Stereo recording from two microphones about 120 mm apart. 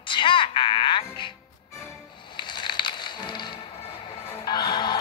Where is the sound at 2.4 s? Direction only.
40° left (ahead or behind).